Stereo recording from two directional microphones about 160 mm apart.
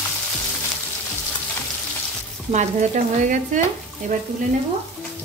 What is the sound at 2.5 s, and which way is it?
Stir, 45° right (ahead or behind).